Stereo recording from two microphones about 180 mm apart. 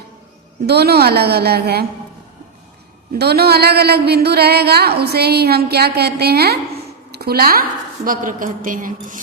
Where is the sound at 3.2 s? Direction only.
60° right (ahead or behind).